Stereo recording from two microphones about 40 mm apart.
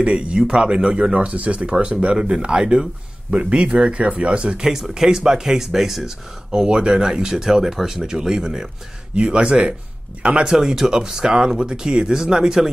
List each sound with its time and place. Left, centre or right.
0.0 s speech: right
4.6 s speech: centre
6.5 s speech: right
9.1 s speech: right
10.5 s speech: centre